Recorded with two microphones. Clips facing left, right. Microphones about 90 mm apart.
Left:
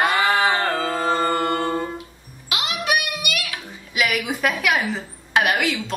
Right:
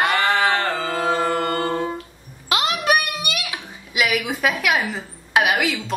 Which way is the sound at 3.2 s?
25° right (ahead or behind).